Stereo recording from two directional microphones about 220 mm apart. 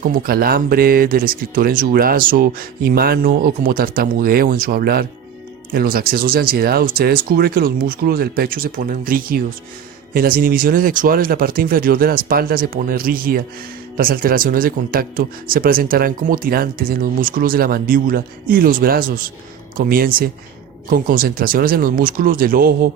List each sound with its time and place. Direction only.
0.0 s speech: 40° right (ahead or behind)